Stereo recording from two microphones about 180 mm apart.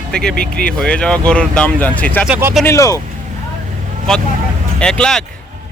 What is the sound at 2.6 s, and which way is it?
Speech, 15° left (ahead or behind).